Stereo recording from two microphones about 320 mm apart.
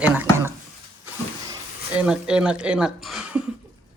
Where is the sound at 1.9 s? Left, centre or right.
Centre.